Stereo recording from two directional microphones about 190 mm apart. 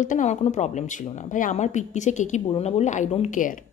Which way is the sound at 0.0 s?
40° left (ahead or behind).